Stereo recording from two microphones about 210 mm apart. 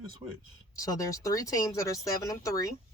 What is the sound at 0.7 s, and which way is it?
A woman's voice, 15° left (ahead or behind).